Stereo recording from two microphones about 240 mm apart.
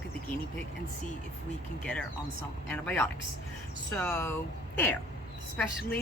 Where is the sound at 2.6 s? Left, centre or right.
Centre.